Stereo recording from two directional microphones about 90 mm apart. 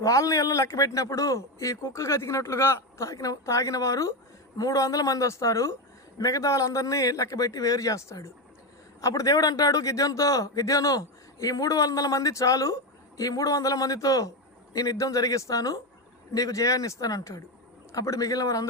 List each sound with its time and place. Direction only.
0.0 s speech: 40° left (ahead or behind)